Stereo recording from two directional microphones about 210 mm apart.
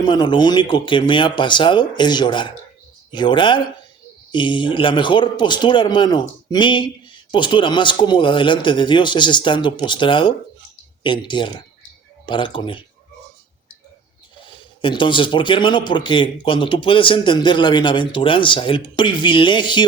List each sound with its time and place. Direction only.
0.0 s speech: 20° left (ahead or behind)
14.3 s speech: 25° left (ahead or behind)